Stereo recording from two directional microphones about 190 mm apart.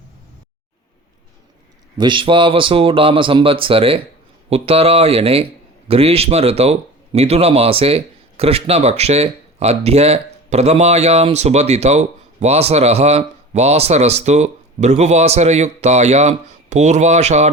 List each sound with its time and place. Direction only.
2.0 s speech: 25° right (ahead or behind)